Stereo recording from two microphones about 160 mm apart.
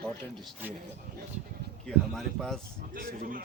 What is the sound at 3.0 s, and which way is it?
Speech, 60° right (ahead or behind).